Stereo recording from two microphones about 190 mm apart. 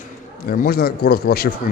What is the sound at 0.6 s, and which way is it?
Speech, 50° left (ahead or behind).